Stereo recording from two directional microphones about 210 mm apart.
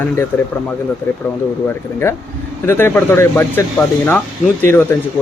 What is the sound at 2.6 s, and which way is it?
Speech, 10° left (ahead or behind).